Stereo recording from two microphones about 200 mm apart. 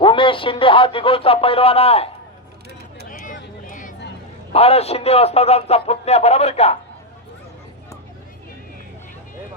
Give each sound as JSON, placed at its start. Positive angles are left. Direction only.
{"t": 0.0, "sound": "speech", "side_deg": 25}
{"t": 3.1, "sound": "a sound", "side_deg": 40}
{"t": 4.5, "sound": "a man's voice", "side_deg": 30}